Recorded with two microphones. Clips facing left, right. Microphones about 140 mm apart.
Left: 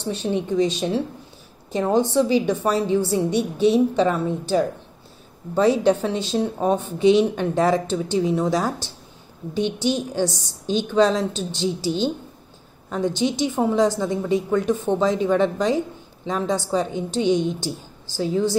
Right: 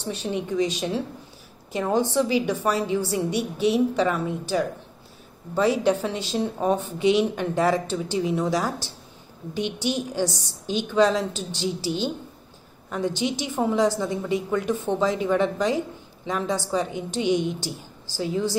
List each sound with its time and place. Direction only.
0.1 s a woman's voice: 25° left (ahead or behind)
12.9 s a woman's voice: 20° left (ahead or behind)